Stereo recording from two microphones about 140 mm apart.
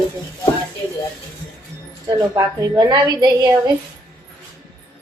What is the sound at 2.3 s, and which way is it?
A woman's voice, 25° right (ahead or behind).